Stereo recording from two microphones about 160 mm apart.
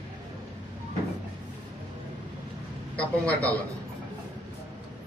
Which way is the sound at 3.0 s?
10° left (ahead or behind).